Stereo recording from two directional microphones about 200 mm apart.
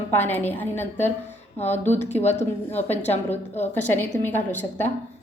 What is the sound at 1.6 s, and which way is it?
Speech, 35° left (ahead or behind).